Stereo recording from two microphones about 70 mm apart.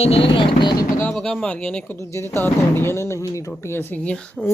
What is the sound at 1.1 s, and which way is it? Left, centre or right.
Speech, centre.